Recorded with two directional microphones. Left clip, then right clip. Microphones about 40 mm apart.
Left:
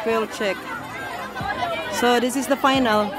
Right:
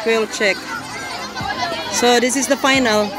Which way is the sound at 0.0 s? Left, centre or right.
Centre.